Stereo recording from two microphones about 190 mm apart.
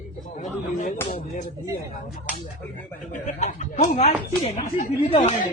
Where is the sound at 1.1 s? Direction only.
45° left (ahead or behind).